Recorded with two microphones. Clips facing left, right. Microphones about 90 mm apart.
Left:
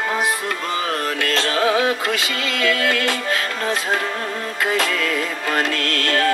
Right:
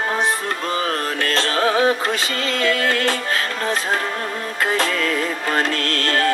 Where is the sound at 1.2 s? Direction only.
35° right (ahead or behind).